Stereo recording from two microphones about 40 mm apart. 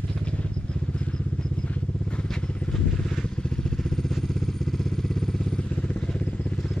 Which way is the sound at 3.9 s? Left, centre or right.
Centre.